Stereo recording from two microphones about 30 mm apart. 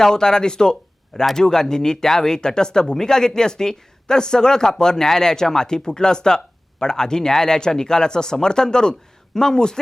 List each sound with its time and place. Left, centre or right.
0.0 s speech: left